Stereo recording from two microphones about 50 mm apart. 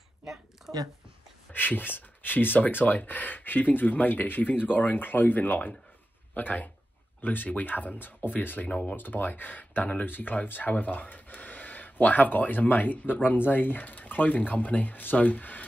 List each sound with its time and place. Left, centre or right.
0.2 s speech: centre
0.7 s a sound: right
1.5 s speech: left
8.6 s speech: left
8.9 s speech: left